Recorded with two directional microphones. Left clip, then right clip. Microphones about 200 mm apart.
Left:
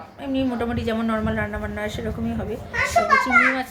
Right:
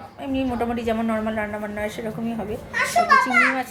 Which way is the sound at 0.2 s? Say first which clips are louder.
Even; centre (ahead or behind).